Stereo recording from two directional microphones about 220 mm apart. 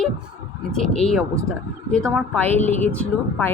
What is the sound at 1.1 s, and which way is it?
Speech, 5° left (ahead or behind).